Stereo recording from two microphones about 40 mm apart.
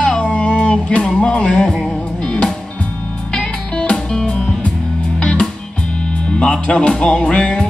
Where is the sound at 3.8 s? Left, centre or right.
Centre.